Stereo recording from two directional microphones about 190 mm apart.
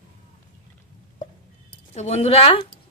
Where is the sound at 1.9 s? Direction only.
35° left (ahead or behind).